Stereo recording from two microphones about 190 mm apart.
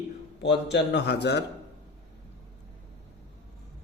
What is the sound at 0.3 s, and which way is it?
A man's voice, 65° left (ahead or behind).